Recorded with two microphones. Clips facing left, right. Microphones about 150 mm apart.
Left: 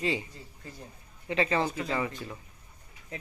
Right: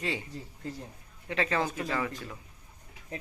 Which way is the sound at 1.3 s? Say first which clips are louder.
Left 2 dB; centre (ahead or behind).